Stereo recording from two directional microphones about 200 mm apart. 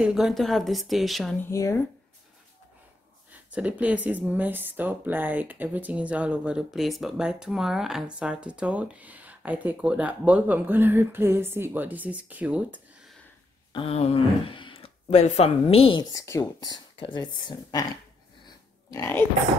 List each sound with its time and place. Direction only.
0.0 s speech: centre (ahead or behind)
1.5 s speech: 15° left (ahead or behind)
3.5 s speech: 5° right (ahead or behind)
13.7 s speech: 30° left (ahead or behind)
18.9 s speech: 15° left (ahead or behind)